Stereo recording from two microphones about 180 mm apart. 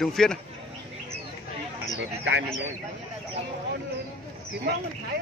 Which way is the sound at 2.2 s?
85° right.